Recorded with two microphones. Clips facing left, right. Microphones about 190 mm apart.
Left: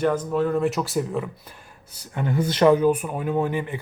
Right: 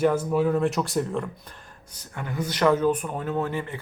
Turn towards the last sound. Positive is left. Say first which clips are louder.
# left 4 dB
turn(degrees=15)  # may be behind; listen again after turning